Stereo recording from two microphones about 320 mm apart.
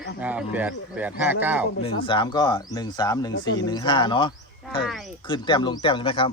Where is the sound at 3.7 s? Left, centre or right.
Centre.